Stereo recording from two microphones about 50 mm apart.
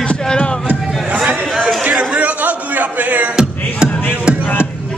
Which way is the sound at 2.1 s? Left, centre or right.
Right.